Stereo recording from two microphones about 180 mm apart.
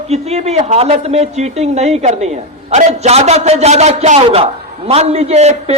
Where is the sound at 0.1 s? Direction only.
35° right (ahead or behind).